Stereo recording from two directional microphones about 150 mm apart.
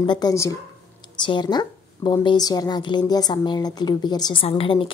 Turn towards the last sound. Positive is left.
turn(degrees=35)  # may be behind; listen again after turning